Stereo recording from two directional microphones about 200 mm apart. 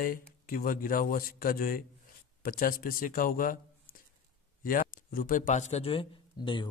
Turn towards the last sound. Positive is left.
turn(degrees=25)  # may be behind; listen again after turning